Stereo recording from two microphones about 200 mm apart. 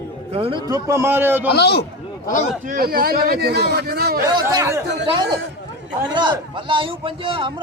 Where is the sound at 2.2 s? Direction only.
40° left (ahead or behind).